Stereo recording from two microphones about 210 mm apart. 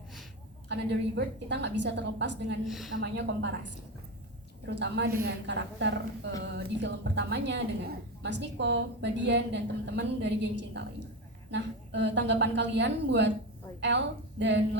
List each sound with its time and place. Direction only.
0.7 s a woman's voice: 55° right (ahead or behind)
2.6 s a woman's voice: centre (ahead or behind)
3.0 s a woman's voice: 55° right (ahead or behind)